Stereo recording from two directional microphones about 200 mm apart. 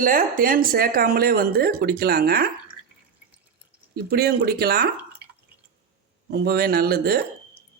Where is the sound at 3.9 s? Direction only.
50° right (ahead or behind).